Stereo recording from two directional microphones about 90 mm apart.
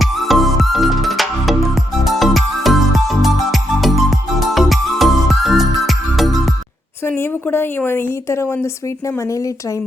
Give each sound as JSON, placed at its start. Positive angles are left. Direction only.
{"t": 0.0, "sound": "music", "side_deg": 0}
{"t": 7.2, "sound": "a sound", "side_deg": 25}
{"t": 7.9, "sound": "a woman's voice", "side_deg": 25}